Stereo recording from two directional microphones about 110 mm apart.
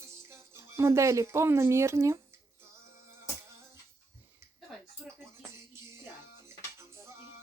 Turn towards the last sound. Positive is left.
turn(degrees=-25)  # may be behind; listen again after turning